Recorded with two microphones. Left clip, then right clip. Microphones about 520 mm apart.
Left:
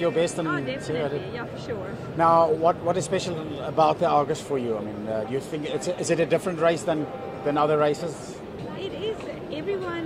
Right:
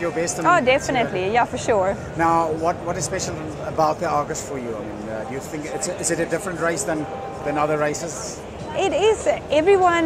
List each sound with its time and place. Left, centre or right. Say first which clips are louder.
0.5 s speech: right 12 dB; right
2.1 s speech: left 2 dB; left
6.0 s speech: left 1 dB; left
7.5 s speech: even; left
8.7 s speech: right 13 dB; right